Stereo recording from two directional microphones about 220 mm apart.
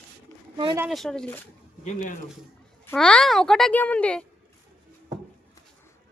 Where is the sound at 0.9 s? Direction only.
Centre (ahead or behind).